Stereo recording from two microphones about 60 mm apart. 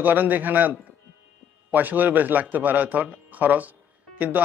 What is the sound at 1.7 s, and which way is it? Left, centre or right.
A man's voice, right.